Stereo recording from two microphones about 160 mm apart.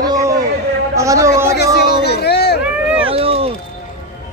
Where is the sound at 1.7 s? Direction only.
90° left.